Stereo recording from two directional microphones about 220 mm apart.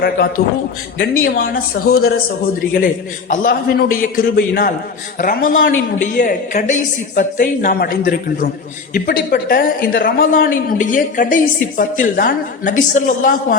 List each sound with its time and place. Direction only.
0.0 s speech: 40° left (ahead or behind)